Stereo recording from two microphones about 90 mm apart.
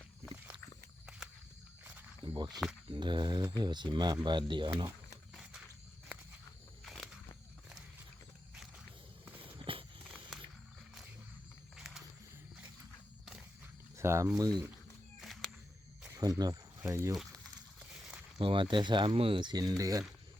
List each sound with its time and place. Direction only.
2.2 s walk: 55° right (ahead or behind)
2.5 s speech: 5° right (ahead or behind)
2.9 s speech: 55° right (ahead or behind)
5.3 s wild animals: 10° right (ahead or behind)
6.8 s wild animals: centre (ahead or behind)
9.4 s walk: 75° right (ahead or behind)
11.8 s wild animals: 5° right (ahead or behind)
14.0 s speech: 30° right (ahead or behind)
15.2 s walk: centre (ahead or behind)
16.1 s speech: 45° right (ahead or behind)
18.3 s speech: 70° right (ahead or behind); by 20.1 s 40° right (ahead or behind)